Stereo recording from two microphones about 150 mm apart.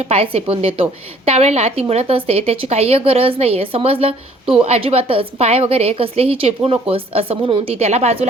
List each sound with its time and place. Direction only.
0.1 s a woman's voice: 40° right (ahead or behind)